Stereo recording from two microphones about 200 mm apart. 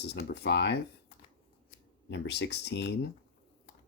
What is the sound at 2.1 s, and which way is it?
Speech, 60° left (ahead or behind).